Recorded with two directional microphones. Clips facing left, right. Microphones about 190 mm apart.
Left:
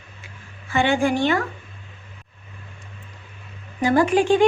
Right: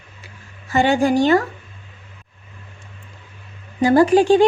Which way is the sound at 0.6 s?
40° right (ahead or behind).